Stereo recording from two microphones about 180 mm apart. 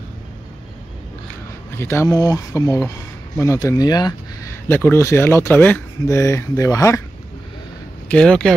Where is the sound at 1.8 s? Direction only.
15° left (ahead or behind).